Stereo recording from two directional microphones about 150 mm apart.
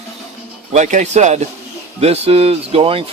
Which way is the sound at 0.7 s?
50° right (ahead or behind).